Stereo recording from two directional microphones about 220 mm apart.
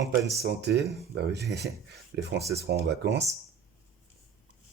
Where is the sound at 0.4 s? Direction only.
50° right (ahead or behind).